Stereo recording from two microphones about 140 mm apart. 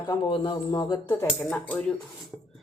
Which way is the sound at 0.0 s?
35° left (ahead or behind).